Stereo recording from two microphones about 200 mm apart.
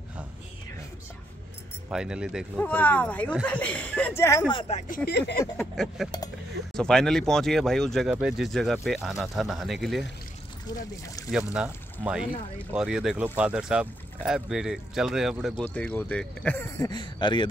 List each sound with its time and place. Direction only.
1.9 s speech: 5° right (ahead or behind); by 5.4 s 50° left (ahead or behind)
6.7 s speech: 5° left (ahead or behind)
11.3 s speech: 5° right (ahead or behind); by 17.5 s 25° left (ahead or behind)